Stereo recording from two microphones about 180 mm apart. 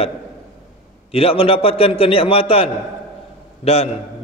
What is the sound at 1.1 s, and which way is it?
A man's voice, 30° left (ahead or behind).